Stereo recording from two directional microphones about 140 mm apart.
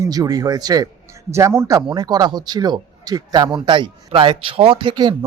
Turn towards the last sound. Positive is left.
turn(degrees=-35)  # may be behind; listen again after turning